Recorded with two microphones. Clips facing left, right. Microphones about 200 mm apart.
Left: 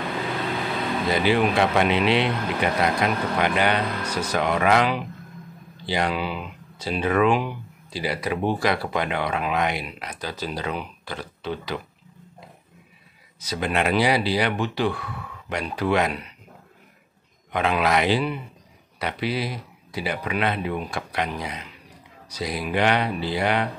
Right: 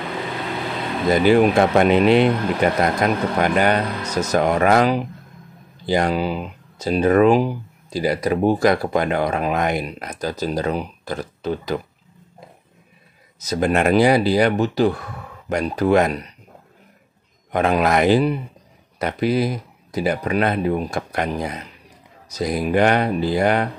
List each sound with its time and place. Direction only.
1.1 s speech: 45° right (ahead or behind)
13.4 s speech: 45° right (ahead or behind)
17.5 s speech: 45° right (ahead or behind)